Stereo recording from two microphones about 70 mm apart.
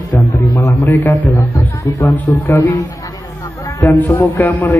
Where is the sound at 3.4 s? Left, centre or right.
Left.